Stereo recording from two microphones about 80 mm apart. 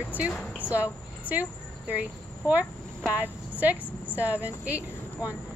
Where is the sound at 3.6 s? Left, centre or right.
Centre.